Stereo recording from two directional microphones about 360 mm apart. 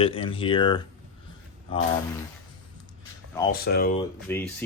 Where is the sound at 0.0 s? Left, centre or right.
Centre.